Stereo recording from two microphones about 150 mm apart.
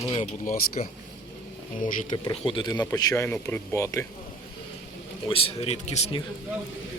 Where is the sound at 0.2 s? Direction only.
55° left (ahead or behind).